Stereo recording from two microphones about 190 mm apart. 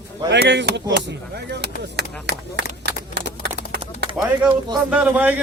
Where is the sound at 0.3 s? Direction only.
65° right (ahead or behind).